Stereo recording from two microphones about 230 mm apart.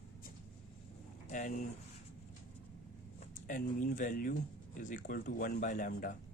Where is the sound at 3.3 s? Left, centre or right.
Left.